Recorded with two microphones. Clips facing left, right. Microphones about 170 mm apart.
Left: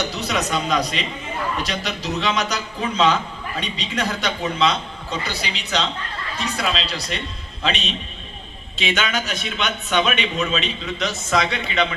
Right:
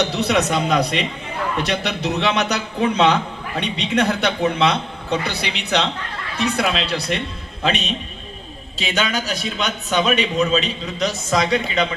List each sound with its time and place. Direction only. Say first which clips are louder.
0.0 s a man's voice: right 5 dB; 65° right (ahead or behind)
8.8 s a man's voice: right 1 dB; 35° right (ahead or behind)